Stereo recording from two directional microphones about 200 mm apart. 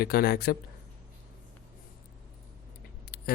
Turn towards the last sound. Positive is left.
turn(degrees=50)  # may be behind; listen again after turning